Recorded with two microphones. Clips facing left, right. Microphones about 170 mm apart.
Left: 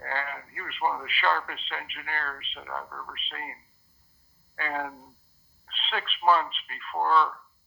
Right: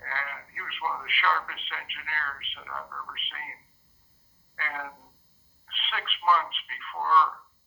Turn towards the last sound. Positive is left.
turn(degrees=35)  # may be behind; listen again after turning